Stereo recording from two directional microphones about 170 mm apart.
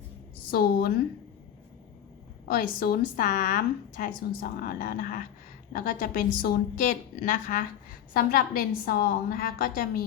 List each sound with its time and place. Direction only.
0.5 s a woman's voice: 60° left (ahead or behind)
2.5 s a woman's voice: 60° left (ahead or behind)
8.1 s a woman's voice: 60° left (ahead or behind)